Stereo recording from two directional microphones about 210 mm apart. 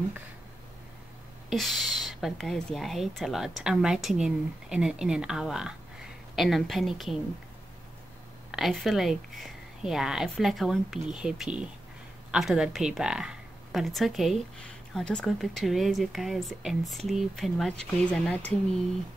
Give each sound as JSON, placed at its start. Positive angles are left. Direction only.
{"t": 1.5, "sound": "speech", "side_deg": 0}
{"t": 8.5, "sound": "speech", "side_deg": 0}